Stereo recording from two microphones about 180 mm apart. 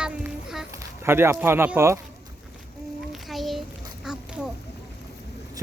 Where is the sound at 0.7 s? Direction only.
15° right (ahead or behind).